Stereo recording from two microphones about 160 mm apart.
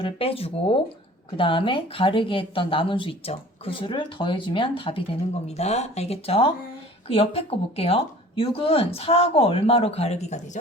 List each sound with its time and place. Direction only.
0.0 s speech: 35° left (ahead or behind)